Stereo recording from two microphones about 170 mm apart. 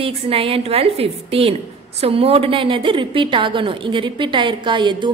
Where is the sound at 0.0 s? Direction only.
35° right (ahead or behind).